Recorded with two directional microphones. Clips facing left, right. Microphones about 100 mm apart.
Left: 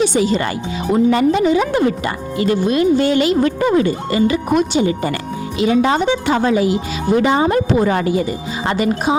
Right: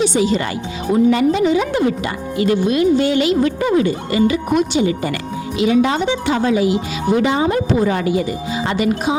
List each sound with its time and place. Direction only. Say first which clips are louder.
0.0 s a woman's voice: left 1 dB; 50° left (ahead or behind)